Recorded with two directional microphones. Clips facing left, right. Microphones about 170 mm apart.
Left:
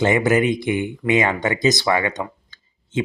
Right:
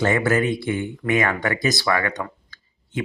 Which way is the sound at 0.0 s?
20° left (ahead or behind).